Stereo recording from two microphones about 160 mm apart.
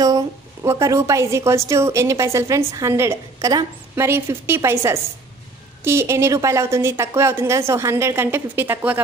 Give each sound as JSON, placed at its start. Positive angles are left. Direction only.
{"t": 0.7, "sound": "a woman's voice", "side_deg": -20}